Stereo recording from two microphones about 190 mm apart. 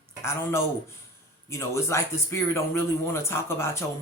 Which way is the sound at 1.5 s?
15° left (ahead or behind).